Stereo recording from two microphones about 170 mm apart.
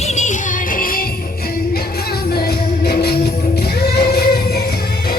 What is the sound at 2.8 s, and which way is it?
Music, 70° left (ahead or behind).